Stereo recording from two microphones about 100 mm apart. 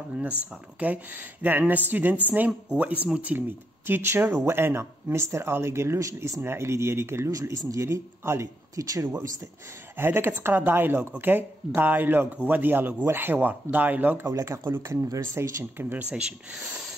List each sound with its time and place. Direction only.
0.7 s speech: 15° right (ahead or behind); by 9.3 s 35° right (ahead or behind)
9.9 s speech: 25° right (ahead or behind)
14.2 s speech: 35° right (ahead or behind)